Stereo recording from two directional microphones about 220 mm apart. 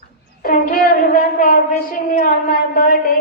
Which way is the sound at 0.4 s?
40° left (ahead or behind).